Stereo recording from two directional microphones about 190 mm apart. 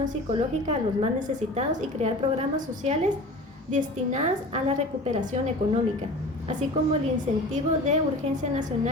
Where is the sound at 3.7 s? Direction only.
40° right (ahead or behind).